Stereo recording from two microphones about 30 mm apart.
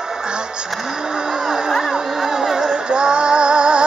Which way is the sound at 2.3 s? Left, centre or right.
Centre.